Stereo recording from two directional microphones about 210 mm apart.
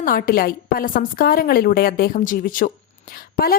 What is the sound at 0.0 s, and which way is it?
A woman's voice, 40° left (ahead or behind).